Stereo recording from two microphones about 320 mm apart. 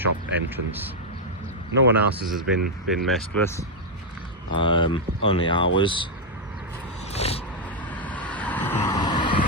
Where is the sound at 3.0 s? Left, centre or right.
Centre.